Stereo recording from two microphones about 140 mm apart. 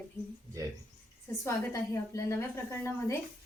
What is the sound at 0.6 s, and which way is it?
Speech, 25° right (ahead or behind).